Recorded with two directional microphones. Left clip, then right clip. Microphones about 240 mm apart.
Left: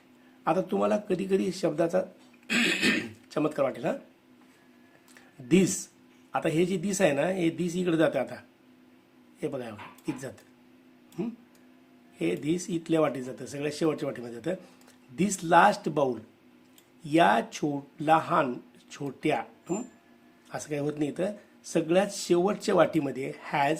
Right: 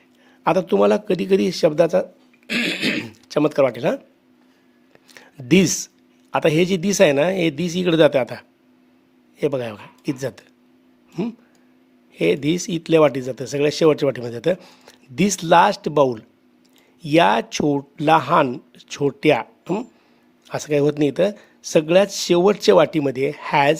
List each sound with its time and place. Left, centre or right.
0.4 s speech: right
5.1 s speech: right